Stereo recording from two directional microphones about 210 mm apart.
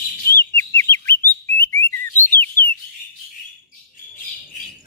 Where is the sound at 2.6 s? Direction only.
40° left (ahead or behind).